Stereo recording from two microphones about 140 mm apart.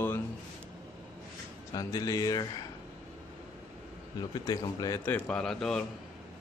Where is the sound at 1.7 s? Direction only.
25° left (ahead or behind).